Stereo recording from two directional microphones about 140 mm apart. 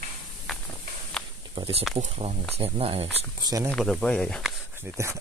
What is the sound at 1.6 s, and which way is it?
Speech, 45° right (ahead or behind).